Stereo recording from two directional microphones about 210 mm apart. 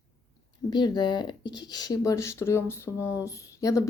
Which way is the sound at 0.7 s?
20° left (ahead or behind).